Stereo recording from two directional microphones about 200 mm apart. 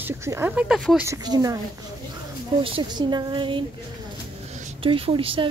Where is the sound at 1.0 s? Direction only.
20° right (ahead or behind).